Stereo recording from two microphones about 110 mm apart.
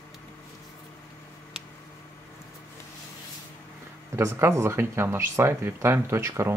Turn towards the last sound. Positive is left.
turn(degrees=-25)  # may be behind; listen again after turning